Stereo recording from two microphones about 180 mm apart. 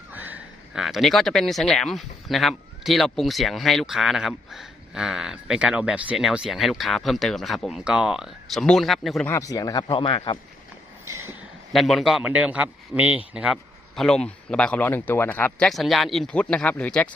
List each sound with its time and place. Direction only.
0.1 s speech: 10° right (ahead or behind)
9.3 s speech: 20° left (ahead or behind)
11.7 s speech: centre (ahead or behind)